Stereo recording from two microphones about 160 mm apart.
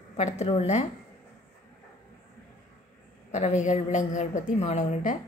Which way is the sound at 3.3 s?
45° left (ahead or behind).